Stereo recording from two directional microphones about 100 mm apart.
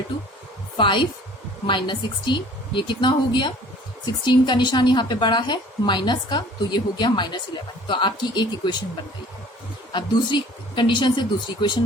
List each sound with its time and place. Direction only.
0.8 s a woman's voice: 55° left (ahead or behind)
9.9 s a woman's voice: 55° left (ahead or behind)